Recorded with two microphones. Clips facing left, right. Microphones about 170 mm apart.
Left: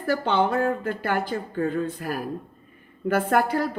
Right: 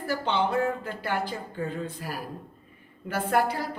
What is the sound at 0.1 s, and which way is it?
A woman's voice, 50° left (ahead or behind).